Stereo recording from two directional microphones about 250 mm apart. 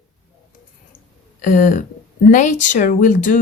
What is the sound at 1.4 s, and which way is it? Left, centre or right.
Speech, left.